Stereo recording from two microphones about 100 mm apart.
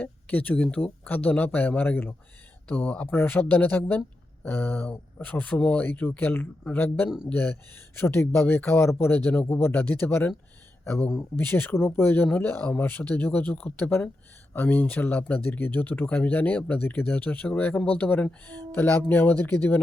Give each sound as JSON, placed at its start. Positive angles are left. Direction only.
{"t": 0.0, "sound": "speech", "side_deg": 15}